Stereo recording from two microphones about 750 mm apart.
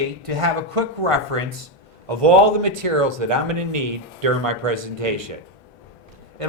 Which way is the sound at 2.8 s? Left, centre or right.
Right.